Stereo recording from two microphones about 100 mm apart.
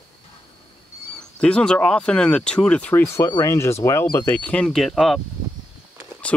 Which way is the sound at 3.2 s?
40° left (ahead or behind).